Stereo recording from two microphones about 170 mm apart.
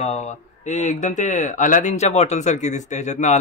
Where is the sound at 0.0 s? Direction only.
40° left (ahead or behind).